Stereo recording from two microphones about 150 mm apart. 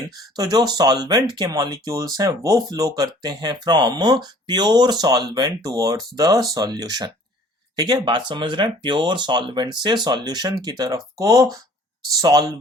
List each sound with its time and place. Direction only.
0.3 s speech: 25° right (ahead or behind)